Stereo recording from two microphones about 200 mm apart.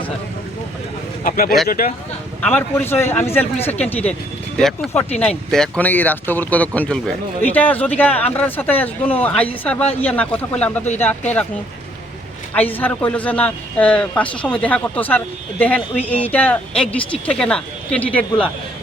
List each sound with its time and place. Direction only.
1.2 s speech: 45° left (ahead or behind)
2.4 s speech: 5° left (ahead or behind)
12.5 s speech: 10° left (ahead or behind)